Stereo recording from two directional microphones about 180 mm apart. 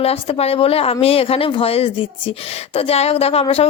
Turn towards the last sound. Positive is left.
turn(degrees=35)  # may be behind; listen again after turning